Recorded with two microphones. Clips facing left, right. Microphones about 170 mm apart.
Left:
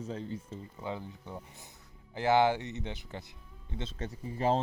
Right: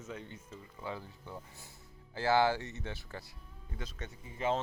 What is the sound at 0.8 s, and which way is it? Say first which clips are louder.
Speech: left 3 dB; 20° left (ahead or behind).